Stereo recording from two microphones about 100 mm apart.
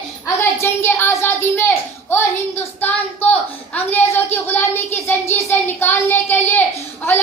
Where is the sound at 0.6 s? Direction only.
25° left (ahead or behind).